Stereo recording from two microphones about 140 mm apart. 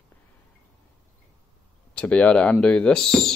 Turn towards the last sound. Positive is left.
turn(degrees=5)  # may be behind; listen again after turning